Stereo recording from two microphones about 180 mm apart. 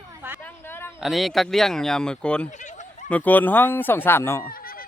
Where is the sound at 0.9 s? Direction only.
Centre (ahead or behind).